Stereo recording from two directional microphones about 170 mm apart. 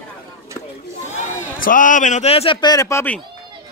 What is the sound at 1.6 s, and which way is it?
Speech, 55° left (ahead or behind).